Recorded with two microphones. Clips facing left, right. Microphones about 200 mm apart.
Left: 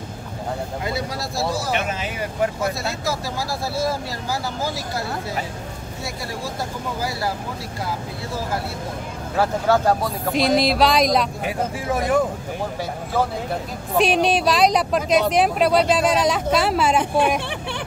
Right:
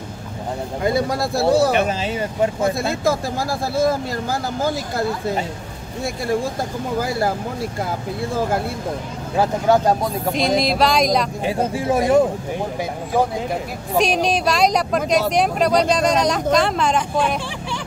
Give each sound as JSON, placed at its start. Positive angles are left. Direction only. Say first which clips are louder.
{"t": 0.8, "sound": "speech", "louder": "right 11 dB", "side_deg": -50}
{"t": 1.8, "sound": "speech", "louder": "right 6 dB", "side_deg": -35}
{"t": 2.8, "sound": "speech", "louder": "right 6 dB", "side_deg": -50}
{"t": 6.0, "sound": "speech", "louder": "right 9 dB", "side_deg": -50}
{"t": 9.4, "sound": "speech", "louder": "right 2 dB", "side_deg": -15}
{"t": 10.3, "sound": "speech", "louder": "left 2 dB", "side_deg": 0}
{"t": 11.4, "sound": "speech", "louder": "right 4 dB", "side_deg": -25}
{"t": 13.1, "sound": "speech", "louder": "right 3 dB", "side_deg": -15}
{"t": 13.9, "sound": "speech", "louder": "even", "side_deg": 0}
{"t": 17.4, "sound": "hubbub", "louder": "even", "side_deg": 60}